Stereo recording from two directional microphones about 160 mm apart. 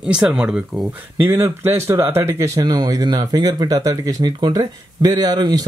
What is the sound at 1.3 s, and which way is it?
Speech, 15° right (ahead or behind).